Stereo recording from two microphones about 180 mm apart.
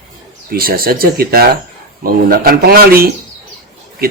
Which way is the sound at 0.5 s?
55° right (ahead or behind).